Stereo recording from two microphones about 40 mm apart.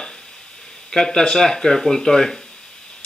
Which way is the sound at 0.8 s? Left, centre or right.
Centre.